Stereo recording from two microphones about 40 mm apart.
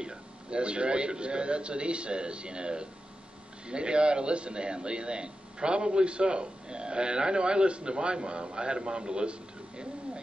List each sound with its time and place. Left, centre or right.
0.0 s a man's voice: right